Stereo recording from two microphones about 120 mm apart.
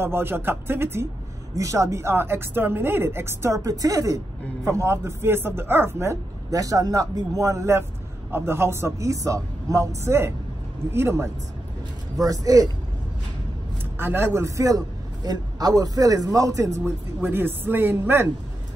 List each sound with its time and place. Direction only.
0.0 s speech: 20° right (ahead or behind)
13.9 s a man's voice: 20° right (ahead or behind)